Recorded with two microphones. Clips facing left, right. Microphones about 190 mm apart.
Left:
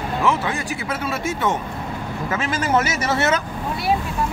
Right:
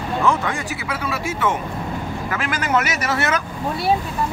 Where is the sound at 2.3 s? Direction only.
30° left (ahead or behind).